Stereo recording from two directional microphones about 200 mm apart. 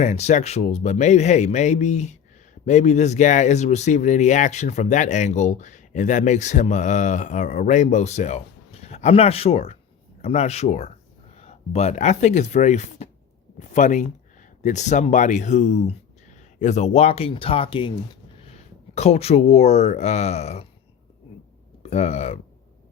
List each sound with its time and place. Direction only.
0.0 s speech: 35° left (ahead or behind)
21.8 s speech: 35° left (ahead or behind)